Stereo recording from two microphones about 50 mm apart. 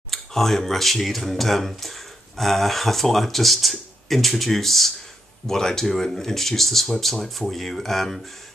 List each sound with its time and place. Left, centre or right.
0.1 s speech: centre